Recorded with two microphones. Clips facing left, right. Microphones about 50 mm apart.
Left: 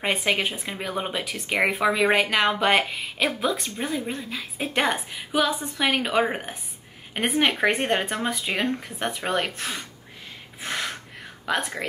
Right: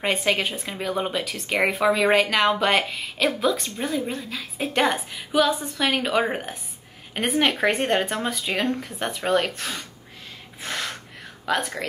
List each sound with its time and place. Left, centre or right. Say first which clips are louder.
0.0 s a woman's voice: right 1 dB; centre
10.6 s snort: even; centre
11.4 s a woman's voice: right 1 dB; centre